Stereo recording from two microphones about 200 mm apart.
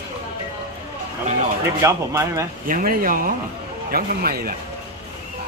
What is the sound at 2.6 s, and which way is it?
Speech, 45° right (ahead or behind).